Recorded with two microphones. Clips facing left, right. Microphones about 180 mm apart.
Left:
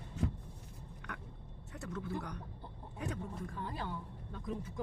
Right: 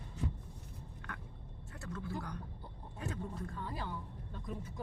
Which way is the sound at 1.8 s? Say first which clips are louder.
Left 2 dB; 20° left (ahead or behind).